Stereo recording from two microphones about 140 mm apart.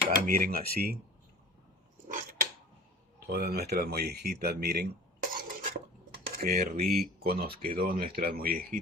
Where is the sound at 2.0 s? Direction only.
80° right.